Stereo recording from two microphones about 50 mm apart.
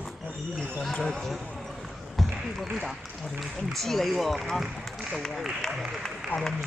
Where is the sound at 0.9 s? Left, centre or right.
Centre.